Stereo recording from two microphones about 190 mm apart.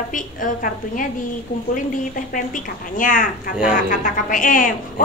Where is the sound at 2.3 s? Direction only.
45° left (ahead or behind).